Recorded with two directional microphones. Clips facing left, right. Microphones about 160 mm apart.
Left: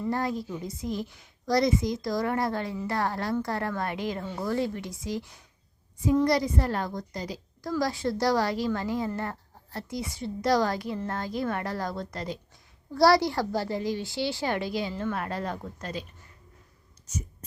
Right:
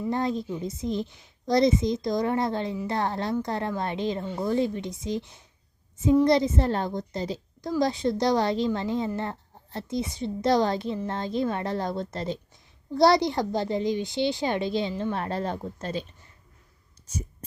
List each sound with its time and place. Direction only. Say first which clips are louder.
0.1 s a woman's voice: right 3 dB; 20° right (ahead or behind)